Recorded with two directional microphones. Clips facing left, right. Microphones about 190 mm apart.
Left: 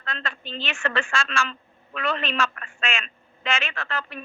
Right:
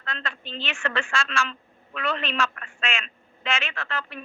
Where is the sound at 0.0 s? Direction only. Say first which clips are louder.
Left 1 dB; 45° left (ahead or behind).